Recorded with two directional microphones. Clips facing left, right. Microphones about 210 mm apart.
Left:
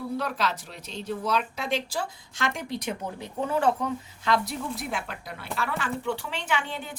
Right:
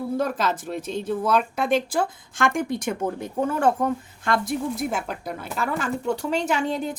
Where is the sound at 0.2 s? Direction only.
50° right (ahead or behind).